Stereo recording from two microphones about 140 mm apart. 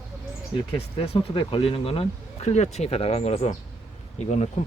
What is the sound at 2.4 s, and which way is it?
Speech, 55° left (ahead or behind).